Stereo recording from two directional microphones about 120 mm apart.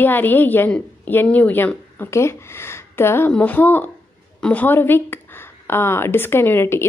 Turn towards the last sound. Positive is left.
turn(degrees=20)  # may be behind; listen again after turning